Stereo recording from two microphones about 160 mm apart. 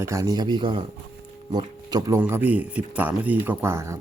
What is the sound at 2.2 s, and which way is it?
Speech, 10° right (ahead or behind).